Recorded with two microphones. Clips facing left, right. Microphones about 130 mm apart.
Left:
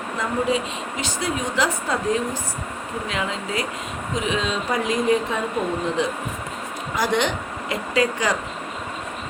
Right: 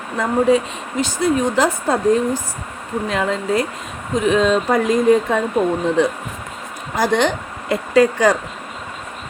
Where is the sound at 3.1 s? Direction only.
45° right (ahead or behind).